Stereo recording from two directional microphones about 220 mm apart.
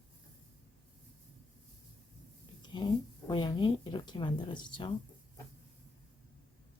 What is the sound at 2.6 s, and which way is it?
A woman's voice, 20° left (ahead or behind).